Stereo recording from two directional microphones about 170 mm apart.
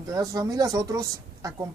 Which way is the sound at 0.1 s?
20° right (ahead or behind).